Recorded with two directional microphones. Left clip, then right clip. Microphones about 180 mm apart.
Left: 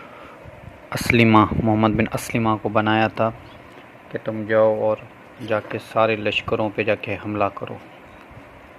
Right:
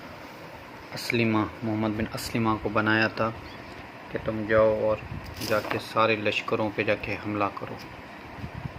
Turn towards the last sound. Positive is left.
turn(degrees=45)  # may be behind; listen again after turning